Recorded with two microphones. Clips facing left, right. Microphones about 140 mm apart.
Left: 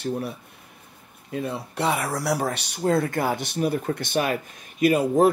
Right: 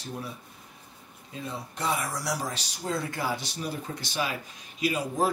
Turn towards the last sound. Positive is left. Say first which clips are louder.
# left 9 dB
turn(degrees=55)  # may be behind; listen again after turning